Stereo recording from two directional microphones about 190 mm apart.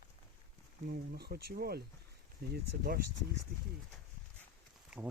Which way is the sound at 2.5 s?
55° right (ahead or behind).